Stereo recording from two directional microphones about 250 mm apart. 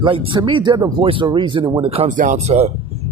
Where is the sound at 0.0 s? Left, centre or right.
Right.